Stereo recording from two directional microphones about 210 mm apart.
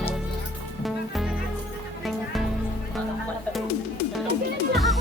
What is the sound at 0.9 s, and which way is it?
Music, centre (ahead or behind).